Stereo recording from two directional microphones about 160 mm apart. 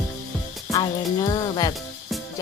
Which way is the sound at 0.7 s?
25° left (ahead or behind).